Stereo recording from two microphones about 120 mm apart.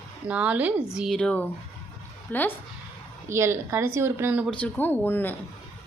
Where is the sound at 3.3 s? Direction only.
20° right (ahead or behind).